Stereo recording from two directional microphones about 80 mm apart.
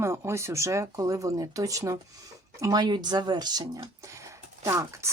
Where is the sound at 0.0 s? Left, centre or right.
Right.